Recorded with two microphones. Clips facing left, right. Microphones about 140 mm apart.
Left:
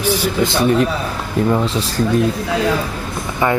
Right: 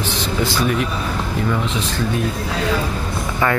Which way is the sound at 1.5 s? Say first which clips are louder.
Left 4 dB; 35° left (ahead or behind).